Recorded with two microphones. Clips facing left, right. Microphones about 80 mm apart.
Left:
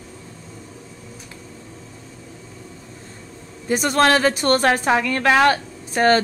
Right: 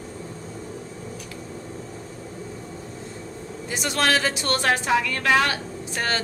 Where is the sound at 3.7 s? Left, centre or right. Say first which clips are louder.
Left 6 dB; left.